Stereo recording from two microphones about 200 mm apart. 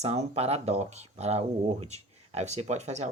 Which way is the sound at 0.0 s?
30° right (ahead or behind).